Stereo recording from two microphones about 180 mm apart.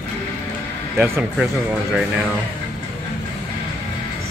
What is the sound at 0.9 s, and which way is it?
Speech, 15° right (ahead or behind).